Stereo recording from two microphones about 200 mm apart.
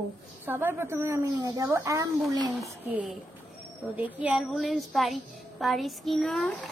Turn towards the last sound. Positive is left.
turn(degrees=0)  # may be behind; listen again after turning